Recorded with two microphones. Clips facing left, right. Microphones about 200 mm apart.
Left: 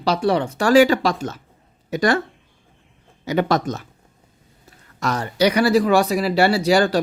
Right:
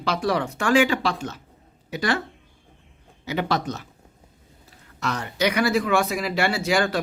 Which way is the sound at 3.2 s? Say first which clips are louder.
Left 6 dB; 45° left (ahead or behind).